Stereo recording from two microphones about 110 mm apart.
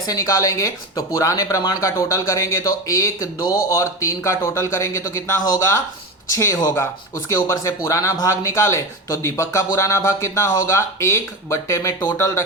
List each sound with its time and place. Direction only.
0.1 s speech: 30° left (ahead or behind)